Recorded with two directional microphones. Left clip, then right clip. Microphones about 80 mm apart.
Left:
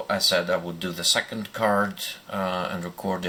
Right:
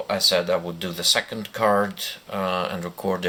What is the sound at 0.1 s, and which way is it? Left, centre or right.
Speech, right.